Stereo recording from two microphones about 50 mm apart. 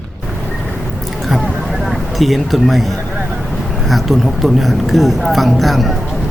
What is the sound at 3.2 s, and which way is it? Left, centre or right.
Vehicle, right.